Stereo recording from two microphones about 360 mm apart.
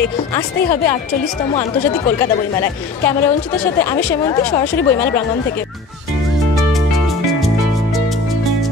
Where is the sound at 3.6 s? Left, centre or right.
Centre.